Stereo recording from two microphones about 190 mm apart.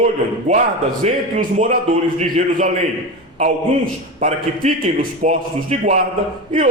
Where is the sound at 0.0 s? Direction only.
40° right (ahead or behind).